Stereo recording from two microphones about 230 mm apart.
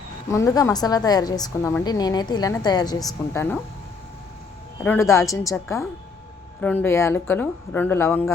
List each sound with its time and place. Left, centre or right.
0.3 s a woman's voice: centre
4.8 s a woman's voice: centre